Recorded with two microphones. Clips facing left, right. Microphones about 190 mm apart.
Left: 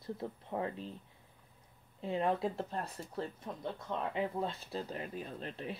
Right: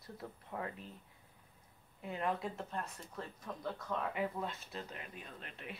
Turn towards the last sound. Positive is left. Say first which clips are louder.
# left 8 dB
turn(degrees=35)  # may be behind; listen again after turning